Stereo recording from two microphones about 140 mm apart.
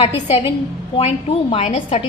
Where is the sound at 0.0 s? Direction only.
50° left (ahead or behind).